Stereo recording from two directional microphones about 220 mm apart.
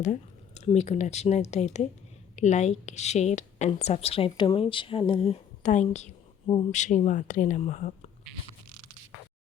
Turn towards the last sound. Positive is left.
turn(degrees=35)  # may be behind; listen again after turning